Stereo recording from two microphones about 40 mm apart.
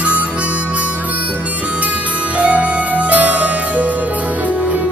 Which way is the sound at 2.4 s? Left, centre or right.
Right.